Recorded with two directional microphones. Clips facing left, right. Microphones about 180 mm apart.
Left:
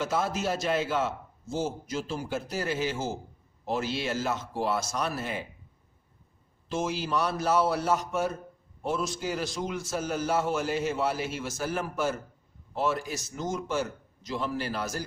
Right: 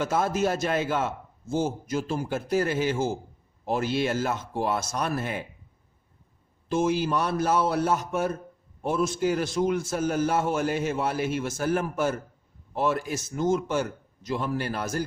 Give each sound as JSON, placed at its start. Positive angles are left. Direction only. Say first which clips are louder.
{"t": 0.0, "sound": "a man's voice", "louder": "right 4 dB", "side_deg": -50}
{"t": 6.7, "sound": "a man's voice", "louder": "right 6 dB", "side_deg": -55}